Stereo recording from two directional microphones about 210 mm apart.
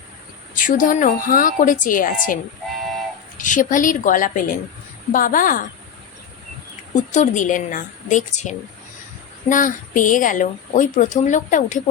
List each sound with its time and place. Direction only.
0.5 s a woman's voice: 40° left (ahead or behind)
7.1 s a woman's voice: 35° left (ahead or behind)